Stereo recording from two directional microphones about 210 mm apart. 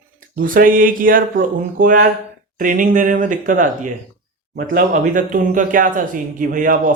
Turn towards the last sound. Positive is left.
turn(degrees=-40)  # may be behind; listen again after turning